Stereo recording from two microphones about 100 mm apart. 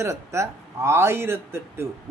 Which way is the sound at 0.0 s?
30° right (ahead or behind).